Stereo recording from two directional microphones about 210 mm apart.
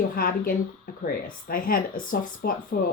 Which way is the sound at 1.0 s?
40° left (ahead or behind).